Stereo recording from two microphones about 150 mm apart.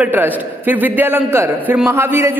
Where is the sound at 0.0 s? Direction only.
10° right (ahead or behind).